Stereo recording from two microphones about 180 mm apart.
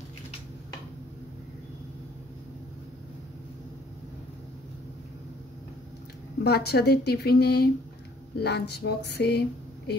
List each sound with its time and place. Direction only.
6.4 s speech: 65° left (ahead or behind)